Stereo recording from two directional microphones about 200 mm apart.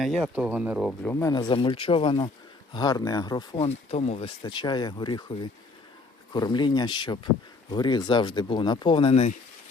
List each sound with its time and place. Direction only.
0.0 s speech: 5° right (ahead or behind)
1.0 s speech: 15° left (ahead or behind)
6.3 s speech: 20° left (ahead or behind)